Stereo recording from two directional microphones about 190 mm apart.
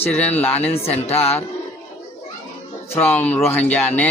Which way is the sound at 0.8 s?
35° left (ahead or behind).